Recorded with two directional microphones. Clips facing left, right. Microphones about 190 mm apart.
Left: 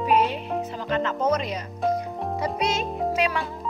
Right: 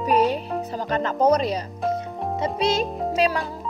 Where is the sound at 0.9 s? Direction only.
40° right (ahead or behind).